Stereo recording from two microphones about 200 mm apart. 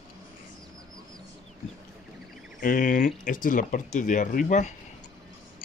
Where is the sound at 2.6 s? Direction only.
40° left (ahead or behind).